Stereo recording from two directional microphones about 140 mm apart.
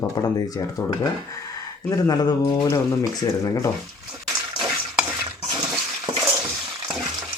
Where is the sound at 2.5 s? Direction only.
25° left (ahead or behind).